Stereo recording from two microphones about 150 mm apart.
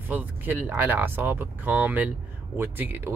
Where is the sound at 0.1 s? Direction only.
10° right (ahead or behind).